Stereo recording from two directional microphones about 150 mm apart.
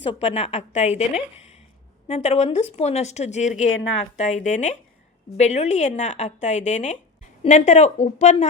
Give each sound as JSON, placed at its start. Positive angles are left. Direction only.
{"t": 0.0, "sound": "speech", "side_deg": 40}